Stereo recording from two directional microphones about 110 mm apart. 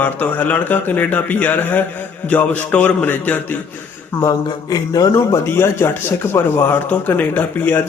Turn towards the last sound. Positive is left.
turn(degrees=15)  # may be behind; listen again after turning